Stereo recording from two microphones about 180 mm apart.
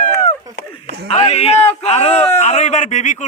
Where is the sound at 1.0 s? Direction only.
35° left (ahead or behind).